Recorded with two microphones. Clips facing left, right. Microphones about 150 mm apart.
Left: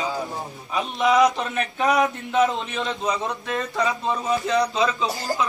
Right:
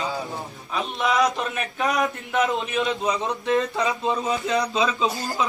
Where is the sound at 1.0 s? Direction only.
Centre (ahead or behind).